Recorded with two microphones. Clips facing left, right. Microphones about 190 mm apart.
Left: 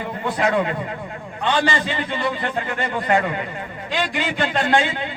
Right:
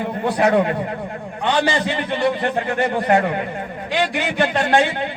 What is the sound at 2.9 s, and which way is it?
Speech, 45° right (ahead or behind).